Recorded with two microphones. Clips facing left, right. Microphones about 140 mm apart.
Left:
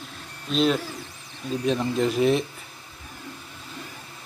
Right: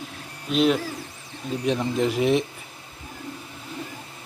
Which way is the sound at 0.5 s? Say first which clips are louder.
Right 2 dB; 15° right (ahead or behind).